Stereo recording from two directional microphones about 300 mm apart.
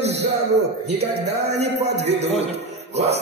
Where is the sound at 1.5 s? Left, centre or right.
Right.